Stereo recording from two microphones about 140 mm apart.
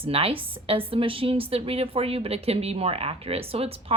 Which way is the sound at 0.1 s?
45° right (ahead or behind).